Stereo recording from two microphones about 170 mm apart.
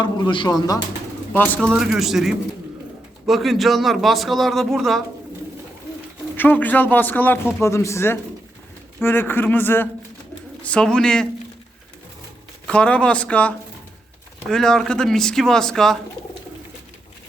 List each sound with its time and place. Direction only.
0.0 s speech: 25° left (ahead or behind)
1.3 s a man's voice: 10° left (ahead or behind)
1.8 s a man's voice: centre (ahead or behind)
6.3 s a man's voice: 10° left (ahead or behind)
12.6 s a man's voice: 5° left (ahead or behind)